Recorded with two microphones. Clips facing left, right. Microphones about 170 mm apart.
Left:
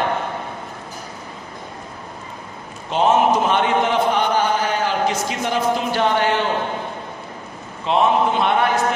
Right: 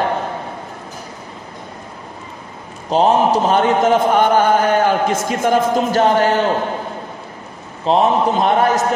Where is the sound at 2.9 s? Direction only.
35° right (ahead or behind).